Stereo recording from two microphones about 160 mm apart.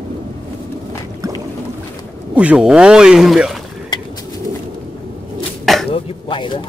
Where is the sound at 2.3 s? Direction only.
5° right (ahead or behind).